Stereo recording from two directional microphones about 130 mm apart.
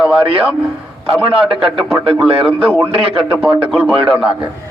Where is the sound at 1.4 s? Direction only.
45° right (ahead or behind).